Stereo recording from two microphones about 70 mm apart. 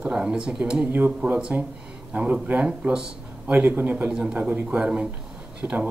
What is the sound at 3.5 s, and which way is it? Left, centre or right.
Speech, right.